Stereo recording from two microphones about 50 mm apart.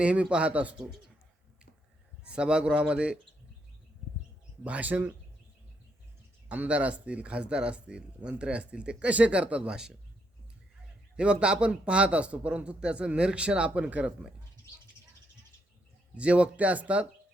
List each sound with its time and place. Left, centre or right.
0.0 s speech: right
2.2 s speech: centre
4.6 s speech: right
6.5 s speech: right
11.2 s speech: right
16.1 s speech: right